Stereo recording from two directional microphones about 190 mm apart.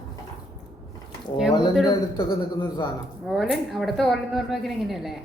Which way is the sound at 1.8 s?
25° left (ahead or behind).